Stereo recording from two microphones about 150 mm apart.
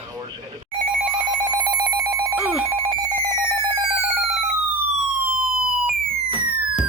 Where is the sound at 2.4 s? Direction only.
10° right (ahead or behind).